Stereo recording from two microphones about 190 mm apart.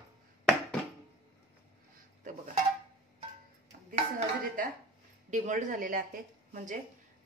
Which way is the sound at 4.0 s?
40° right (ahead or behind).